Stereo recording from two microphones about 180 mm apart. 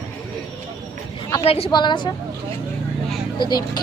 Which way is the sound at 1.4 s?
35° left (ahead or behind).